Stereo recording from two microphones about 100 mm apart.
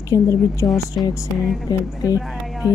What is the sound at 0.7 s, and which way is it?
Speech, centre (ahead or behind).